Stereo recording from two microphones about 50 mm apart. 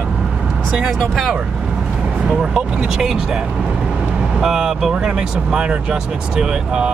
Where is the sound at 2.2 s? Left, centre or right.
Centre.